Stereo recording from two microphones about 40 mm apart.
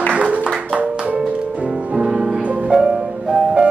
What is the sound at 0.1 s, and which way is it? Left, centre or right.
Music, right.